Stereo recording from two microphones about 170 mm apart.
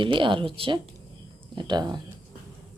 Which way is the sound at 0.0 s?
30° right (ahead or behind).